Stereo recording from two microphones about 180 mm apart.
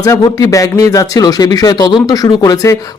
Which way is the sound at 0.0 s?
20° left (ahead or behind).